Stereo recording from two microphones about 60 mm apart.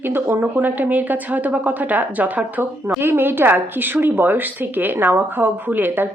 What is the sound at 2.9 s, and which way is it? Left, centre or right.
A woman's voice, right.